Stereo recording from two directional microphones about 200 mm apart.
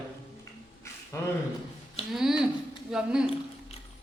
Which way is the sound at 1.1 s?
15° left (ahead or behind).